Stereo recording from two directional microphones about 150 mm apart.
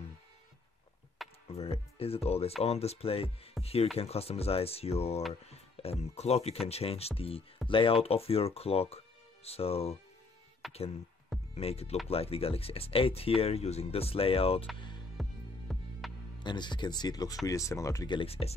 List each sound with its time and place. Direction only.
1.5 s speech: 40° left (ahead or behind)
10.6 s speech: centre (ahead or behind)
11.5 s speech: 45° left (ahead or behind)
15.2 s music: centre (ahead or behind)
16.4 s speech: 30° left (ahead or behind)